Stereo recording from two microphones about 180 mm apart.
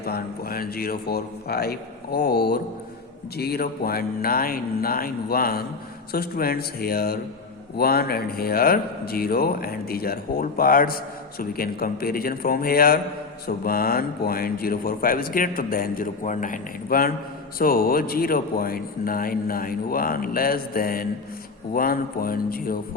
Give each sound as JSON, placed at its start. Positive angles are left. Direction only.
{"t": 0.0, "sound": "a man's voice", "side_deg": 55}